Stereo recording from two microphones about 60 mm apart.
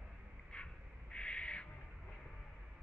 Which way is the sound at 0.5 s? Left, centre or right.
Centre.